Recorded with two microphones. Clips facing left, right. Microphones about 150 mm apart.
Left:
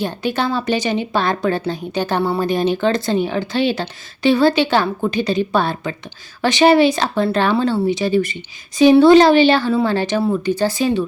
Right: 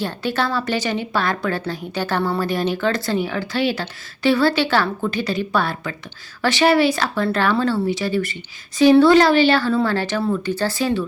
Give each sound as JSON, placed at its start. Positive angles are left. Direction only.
{"t": 0.0, "sound": "speech", "side_deg": 15}